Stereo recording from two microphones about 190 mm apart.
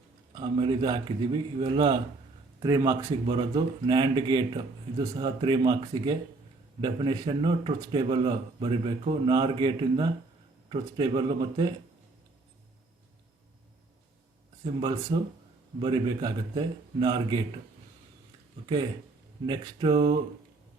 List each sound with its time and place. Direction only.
0.3 s a man's voice: 25° right (ahead or behind)
14.6 s a man's voice: 25° right (ahead or behind)
18.6 s a man's voice: 25° right (ahead or behind)